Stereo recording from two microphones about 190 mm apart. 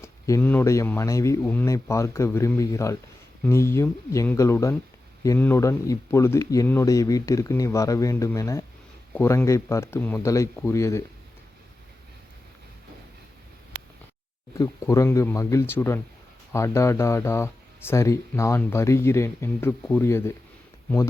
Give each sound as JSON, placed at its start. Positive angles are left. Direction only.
{"t": 0.0, "sound": "speech", "side_deg": 15}
{"t": 14.6, "sound": "speech", "side_deg": 15}